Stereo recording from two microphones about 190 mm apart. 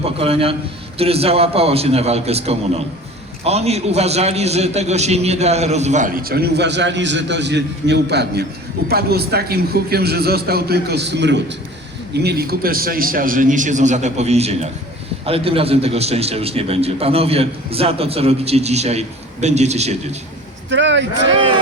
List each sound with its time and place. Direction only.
0.0 s a man's voice: 30° right (ahead or behind)
20.7 s speech: 70° right (ahead or behind)